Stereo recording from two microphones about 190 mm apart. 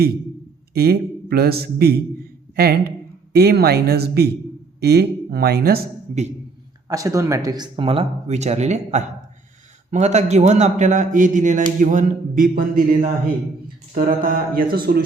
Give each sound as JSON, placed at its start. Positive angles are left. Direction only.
{"t": 0.7, "sound": "a man's voice", "side_deg": -55}
{"t": 2.6, "sound": "music", "side_deg": -55}
{"t": 3.3, "sound": "a man's voice", "side_deg": -55}
{"t": 6.8, "sound": "speech", "side_deg": -20}
{"t": 11.8, "sound": "music", "side_deg": -40}
{"t": 13.9, "sound": "music", "side_deg": -45}